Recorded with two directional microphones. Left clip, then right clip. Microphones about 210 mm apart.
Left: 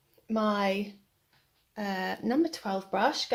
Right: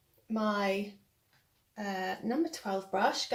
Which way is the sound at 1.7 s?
50° left (ahead or behind).